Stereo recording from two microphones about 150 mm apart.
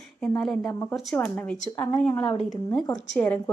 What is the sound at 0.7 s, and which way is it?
Speech, 15° left (ahead or behind).